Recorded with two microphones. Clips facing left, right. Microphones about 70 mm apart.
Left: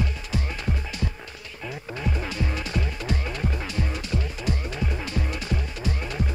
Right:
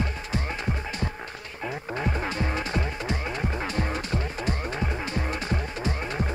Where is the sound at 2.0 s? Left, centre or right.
Right.